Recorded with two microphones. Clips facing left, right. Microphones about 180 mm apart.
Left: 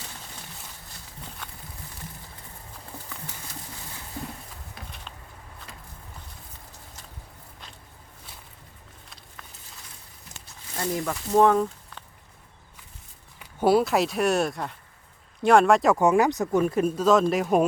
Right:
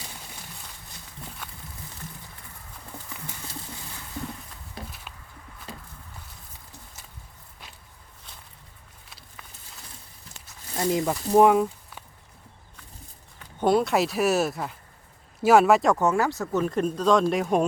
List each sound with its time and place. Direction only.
4.8 s a sound: 30° right (ahead or behind)
10.8 s speech: 20° right (ahead or behind)
13.4 s speech: 5° left (ahead or behind)
16.0 s speech: 15° left (ahead or behind)